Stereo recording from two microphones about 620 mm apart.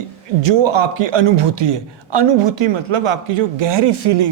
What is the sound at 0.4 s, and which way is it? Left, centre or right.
A man's voice, right.